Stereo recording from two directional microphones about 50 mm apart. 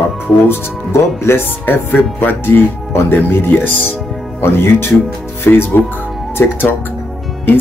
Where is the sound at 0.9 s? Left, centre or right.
Left.